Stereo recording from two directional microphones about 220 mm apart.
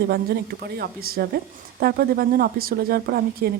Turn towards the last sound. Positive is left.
turn(degrees=-45)  # may be behind; listen again after turning